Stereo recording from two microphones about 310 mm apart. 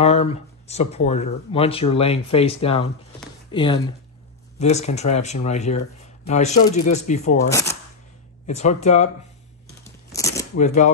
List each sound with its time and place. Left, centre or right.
0.0 s speech: centre
7.4 s speech: centre
8.5 s speech: left
9.8 s a sound: centre
10.5 s speech: left